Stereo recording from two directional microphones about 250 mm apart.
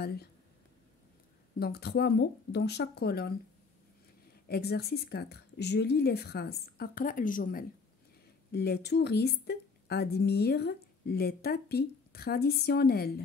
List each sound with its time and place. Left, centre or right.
0.0 s a woman's voice: left
1.6 s a woman's voice: left
4.5 s a woman's voice: left